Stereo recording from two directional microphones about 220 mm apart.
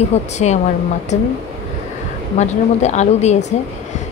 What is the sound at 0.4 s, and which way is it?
Speech, 30° left (ahead or behind).